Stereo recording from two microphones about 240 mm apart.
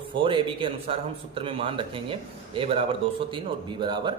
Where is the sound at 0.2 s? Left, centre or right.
Right.